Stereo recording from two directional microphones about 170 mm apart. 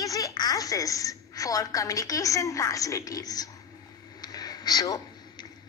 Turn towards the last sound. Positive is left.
turn(degrees=25)  # may be behind; listen again after turning